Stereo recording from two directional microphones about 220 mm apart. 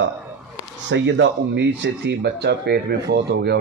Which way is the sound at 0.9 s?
55° right (ahead or behind).